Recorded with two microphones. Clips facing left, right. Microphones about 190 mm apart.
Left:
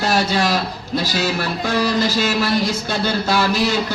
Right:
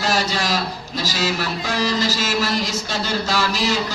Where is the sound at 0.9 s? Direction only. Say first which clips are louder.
Left 3 dB; 55° left (ahead or behind).